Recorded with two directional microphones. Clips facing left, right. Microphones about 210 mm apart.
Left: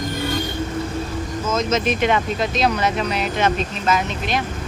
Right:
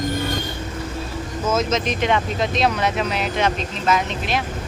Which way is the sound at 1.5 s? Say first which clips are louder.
Even; 5° right (ahead or behind).